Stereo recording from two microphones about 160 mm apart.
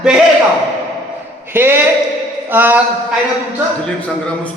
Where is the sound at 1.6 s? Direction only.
15° right (ahead or behind).